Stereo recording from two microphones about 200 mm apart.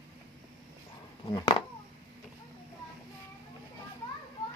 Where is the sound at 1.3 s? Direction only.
20° left (ahead or behind).